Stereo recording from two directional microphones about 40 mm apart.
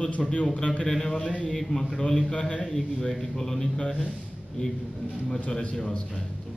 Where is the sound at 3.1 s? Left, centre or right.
Centre.